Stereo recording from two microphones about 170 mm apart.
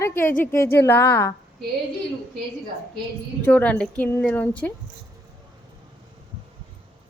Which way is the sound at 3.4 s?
10° left (ahead or behind).